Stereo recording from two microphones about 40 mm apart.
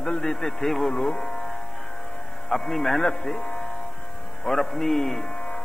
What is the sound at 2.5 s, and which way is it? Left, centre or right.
A man's voice, centre.